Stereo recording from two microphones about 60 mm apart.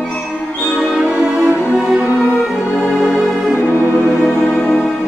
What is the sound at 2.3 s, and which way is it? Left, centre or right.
Music, centre.